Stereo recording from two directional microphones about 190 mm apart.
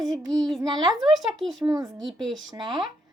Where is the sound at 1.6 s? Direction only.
20° right (ahead or behind).